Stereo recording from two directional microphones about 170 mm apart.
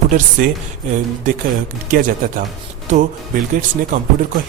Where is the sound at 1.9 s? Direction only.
50° right (ahead or behind).